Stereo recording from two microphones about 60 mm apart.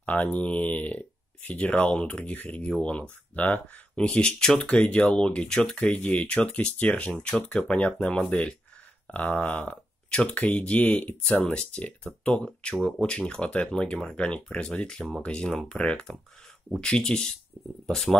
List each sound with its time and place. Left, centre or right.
0.0 s speech: left
2.7 s speech: centre